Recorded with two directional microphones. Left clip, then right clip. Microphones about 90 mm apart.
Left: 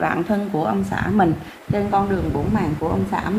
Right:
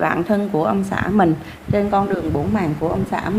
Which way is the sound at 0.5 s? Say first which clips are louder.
Right 3 dB; 60° right (ahead or behind).